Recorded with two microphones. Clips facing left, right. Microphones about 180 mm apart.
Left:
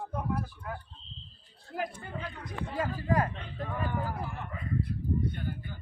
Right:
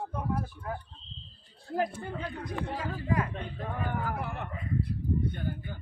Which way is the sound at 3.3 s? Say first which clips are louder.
Right 1 dB; 55° right (ahead or behind).